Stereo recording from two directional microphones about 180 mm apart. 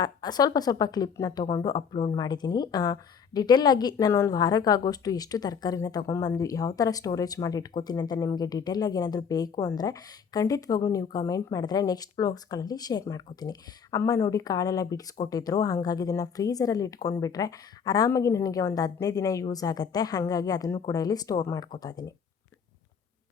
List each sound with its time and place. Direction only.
0.0 s a woman's voice: 20° left (ahead or behind)